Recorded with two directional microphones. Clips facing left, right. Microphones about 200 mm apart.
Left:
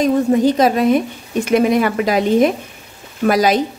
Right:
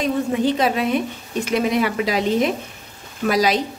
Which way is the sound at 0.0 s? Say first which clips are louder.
Left 6 dB; 40° left (ahead or behind).